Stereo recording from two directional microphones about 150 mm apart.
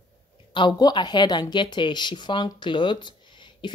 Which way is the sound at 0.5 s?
30° left (ahead or behind).